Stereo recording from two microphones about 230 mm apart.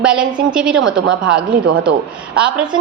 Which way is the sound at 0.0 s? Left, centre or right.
Centre.